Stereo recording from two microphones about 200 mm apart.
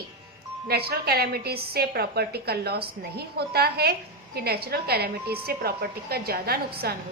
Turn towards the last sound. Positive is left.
turn(degrees=-50)  # may be behind; listen again after turning